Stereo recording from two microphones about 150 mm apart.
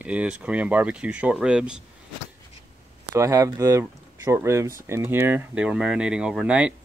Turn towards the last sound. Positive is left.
turn(degrees=-5)  # may be behind; listen again after turning